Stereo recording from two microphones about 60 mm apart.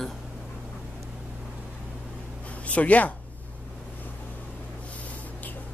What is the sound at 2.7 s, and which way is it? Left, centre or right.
Speech, left.